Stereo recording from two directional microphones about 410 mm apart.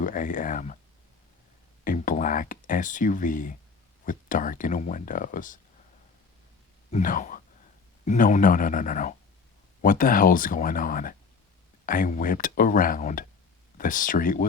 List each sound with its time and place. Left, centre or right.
0.0 s speech: centre
1.8 s speech: centre
6.9 s speech: centre